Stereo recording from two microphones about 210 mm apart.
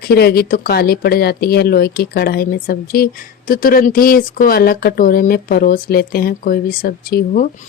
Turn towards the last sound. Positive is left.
turn(degrees=45)  # may be behind; listen again after turning